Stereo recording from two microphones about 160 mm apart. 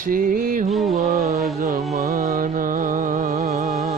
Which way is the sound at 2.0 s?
65° right (ahead or behind).